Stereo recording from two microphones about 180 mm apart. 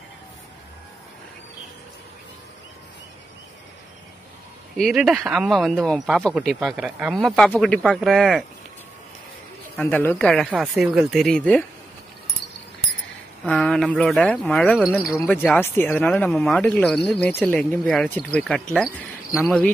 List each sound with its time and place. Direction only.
4.7 s speech: centre (ahead or behind)
9.8 s speech: 10° left (ahead or behind)
13.5 s speech: 5° left (ahead or behind)
15.1 s speech: 10° left (ahead or behind)